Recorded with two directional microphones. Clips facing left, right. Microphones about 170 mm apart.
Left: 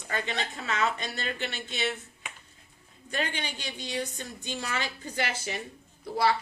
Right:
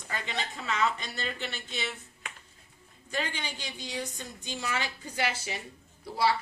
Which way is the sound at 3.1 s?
65° left (ahead or behind).